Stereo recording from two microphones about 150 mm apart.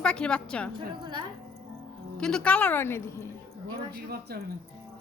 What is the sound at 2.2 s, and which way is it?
Speech, 5° left (ahead or behind).